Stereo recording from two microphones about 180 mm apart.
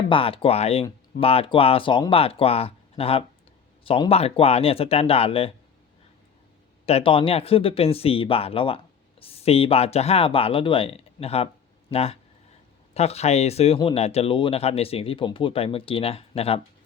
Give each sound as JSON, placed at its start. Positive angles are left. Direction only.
{"t": 0.1, "sound": "speech", "side_deg": 30}
{"t": 6.8, "sound": "speech", "side_deg": 30}